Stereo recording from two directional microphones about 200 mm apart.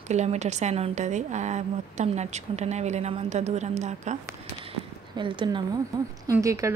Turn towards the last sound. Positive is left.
turn(degrees=-15)  # may be behind; listen again after turning